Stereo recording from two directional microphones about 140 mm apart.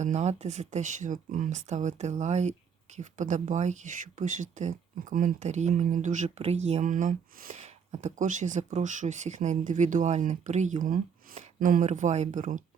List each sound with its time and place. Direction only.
0.0 s speech: 55° right (ahead or behind)